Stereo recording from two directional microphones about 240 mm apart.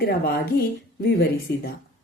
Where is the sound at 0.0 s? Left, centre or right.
Left.